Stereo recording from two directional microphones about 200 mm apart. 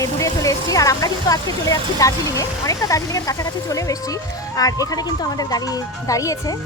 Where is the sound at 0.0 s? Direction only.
15° left (ahead or behind).